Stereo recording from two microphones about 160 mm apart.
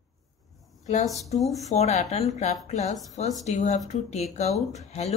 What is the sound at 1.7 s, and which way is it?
Speech, 45° left (ahead or behind).